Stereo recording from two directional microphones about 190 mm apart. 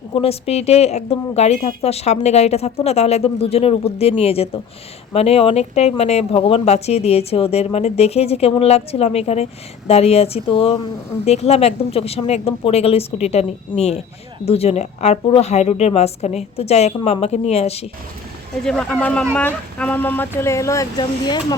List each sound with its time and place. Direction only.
0.1 s speech: 30° left (ahead or behind)
18.6 s speech: 5° left (ahead or behind)